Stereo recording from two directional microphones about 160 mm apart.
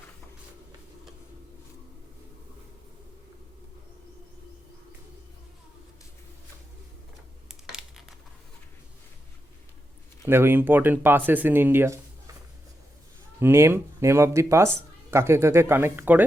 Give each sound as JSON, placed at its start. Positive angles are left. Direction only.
{"t": 7.4, "sound": "a sound", "side_deg": -5}
{"t": 10.2, "sound": "speech", "side_deg": -15}
{"t": 13.4, "sound": "speech", "side_deg": -15}